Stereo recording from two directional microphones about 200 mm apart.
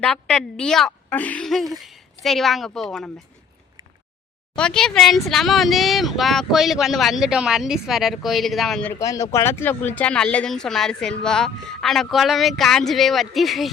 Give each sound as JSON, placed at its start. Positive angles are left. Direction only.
{"t": 0.0, "sound": "speech", "side_deg": 5}
{"t": 4.5, "sound": "speech", "side_deg": 5}
{"t": 8.9, "sound": "speech", "side_deg": 15}